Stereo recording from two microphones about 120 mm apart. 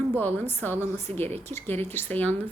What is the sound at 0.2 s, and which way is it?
Speech, 15° left (ahead or behind).